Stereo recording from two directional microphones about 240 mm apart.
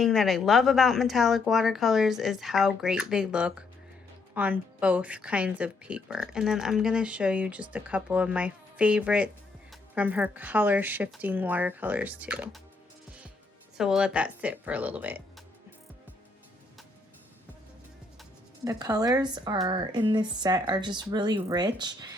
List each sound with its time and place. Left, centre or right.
0.0 s a woman's voice: centre
13.7 s speech: centre
18.6 s a woman's voice: centre